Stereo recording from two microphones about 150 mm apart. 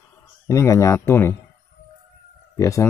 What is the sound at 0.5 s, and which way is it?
Speech, 20° left (ahead or behind).